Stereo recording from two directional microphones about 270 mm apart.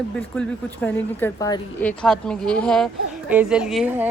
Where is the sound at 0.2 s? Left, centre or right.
Centre.